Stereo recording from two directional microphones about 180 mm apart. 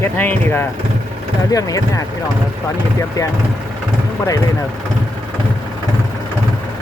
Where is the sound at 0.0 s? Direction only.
10° left (ahead or behind).